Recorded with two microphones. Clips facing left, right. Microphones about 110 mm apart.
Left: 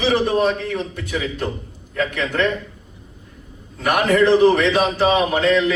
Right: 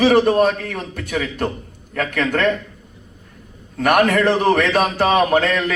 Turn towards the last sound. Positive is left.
turn(degrees=-55)  # may be behind; listen again after turning